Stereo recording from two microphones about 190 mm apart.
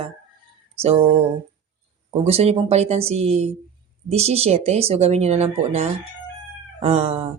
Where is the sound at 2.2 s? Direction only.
30° right (ahead or behind).